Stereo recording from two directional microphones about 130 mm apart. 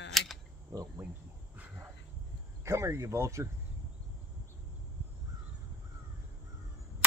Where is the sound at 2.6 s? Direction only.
20° right (ahead or behind).